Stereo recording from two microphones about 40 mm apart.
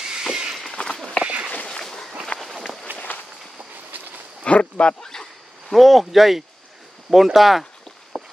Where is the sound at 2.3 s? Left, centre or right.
Left.